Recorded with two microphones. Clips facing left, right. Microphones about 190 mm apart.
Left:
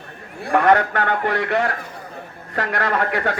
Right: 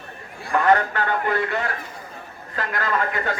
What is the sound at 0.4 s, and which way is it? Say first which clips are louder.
A man's voice: left 3 dB; 65° left (ahead or behind).